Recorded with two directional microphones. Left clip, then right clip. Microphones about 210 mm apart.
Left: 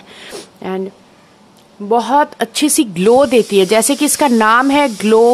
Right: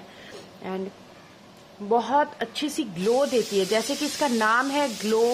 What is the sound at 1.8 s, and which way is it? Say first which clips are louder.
Speech: left 10 dB; 40° left (ahead or behind).